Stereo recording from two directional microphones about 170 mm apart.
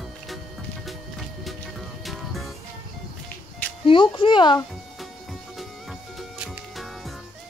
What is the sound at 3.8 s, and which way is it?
Speech, 30° left (ahead or behind).